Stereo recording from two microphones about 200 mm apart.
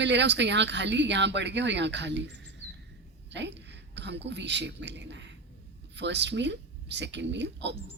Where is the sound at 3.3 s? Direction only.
60° right (ahead or behind).